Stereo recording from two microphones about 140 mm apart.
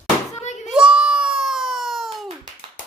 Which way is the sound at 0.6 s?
5° right (ahead or behind).